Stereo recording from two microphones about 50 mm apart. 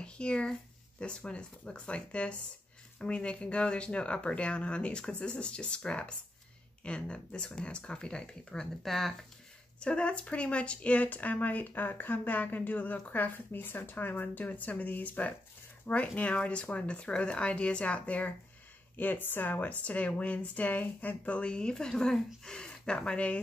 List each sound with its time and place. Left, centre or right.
0.0 s speech: left
8.8 s speech: centre
9.8 s speech: left
18.9 s speech: left
19.8 s speech: left